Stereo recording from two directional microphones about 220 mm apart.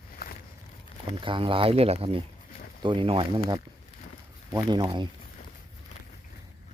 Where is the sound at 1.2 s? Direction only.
25° right (ahead or behind).